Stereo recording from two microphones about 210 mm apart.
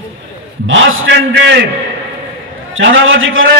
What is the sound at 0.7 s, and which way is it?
Speech, 70° right (ahead or behind).